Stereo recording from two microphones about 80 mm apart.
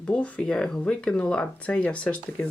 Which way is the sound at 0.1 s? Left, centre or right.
Centre.